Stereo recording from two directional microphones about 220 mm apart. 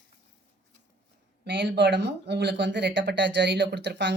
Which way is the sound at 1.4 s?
50° right (ahead or behind).